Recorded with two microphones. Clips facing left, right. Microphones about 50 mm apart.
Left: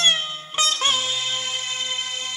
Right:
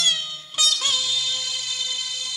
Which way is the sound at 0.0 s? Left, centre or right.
Left.